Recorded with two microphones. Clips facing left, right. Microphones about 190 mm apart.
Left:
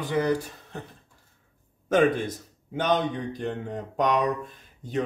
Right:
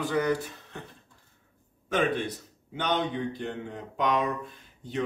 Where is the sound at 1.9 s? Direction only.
45° left (ahead or behind).